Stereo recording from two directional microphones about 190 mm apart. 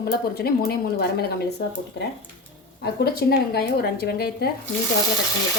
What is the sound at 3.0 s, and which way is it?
A woman's voice, 55° left (ahead or behind).